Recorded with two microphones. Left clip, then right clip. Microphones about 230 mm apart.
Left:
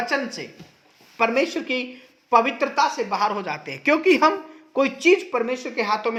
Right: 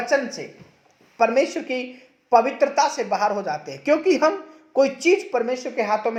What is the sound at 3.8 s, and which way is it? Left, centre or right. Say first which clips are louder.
Speech: left 1 dB; left.